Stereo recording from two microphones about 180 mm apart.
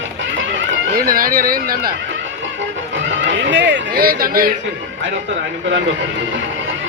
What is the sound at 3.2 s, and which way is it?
Speech, 85° right.